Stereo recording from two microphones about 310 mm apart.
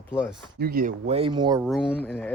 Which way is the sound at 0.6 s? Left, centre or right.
Right.